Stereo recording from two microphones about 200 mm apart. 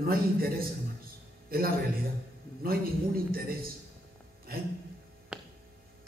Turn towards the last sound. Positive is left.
turn(degrees=-5)  # may be behind; listen again after turning